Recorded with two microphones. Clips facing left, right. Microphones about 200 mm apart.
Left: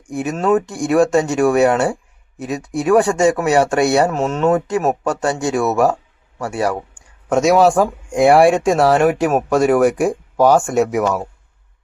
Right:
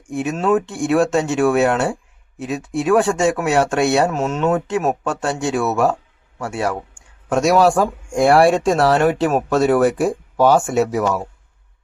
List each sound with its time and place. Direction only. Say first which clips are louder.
0.1 s speech: left 1 dB; centre (ahead or behind)
8.1 s speech: left 2 dB; 20° left (ahead or behind)
8.7 s speech: left 2 dB; centre (ahead or behind)
9.9 s speech: left 1 dB; 10° left (ahead or behind)
10.3 s speech: left 1 dB; 5° right (ahead or behind)
10.9 s speech: left 2 dB; 10° left (ahead or behind)